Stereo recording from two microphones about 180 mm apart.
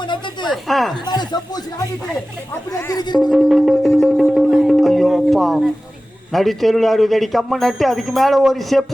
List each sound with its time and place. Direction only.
0.5 s speech: centre (ahead or behind)
1.0 s speech: 25° left (ahead or behind)
2.7 s speech: 20° left (ahead or behind)
3.2 s music: centre (ahead or behind)
6.3 s speech: centre (ahead or behind)